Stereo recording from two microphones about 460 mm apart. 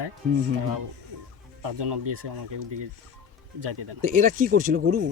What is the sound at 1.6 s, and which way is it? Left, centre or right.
Speech, right.